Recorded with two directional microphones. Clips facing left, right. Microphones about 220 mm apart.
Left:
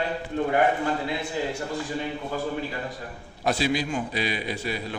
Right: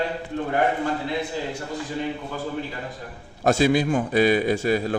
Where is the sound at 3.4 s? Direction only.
50° right (ahead or behind).